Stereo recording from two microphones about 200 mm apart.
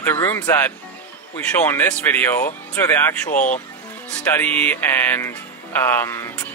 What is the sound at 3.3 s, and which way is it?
Speech, 40° left (ahead or behind).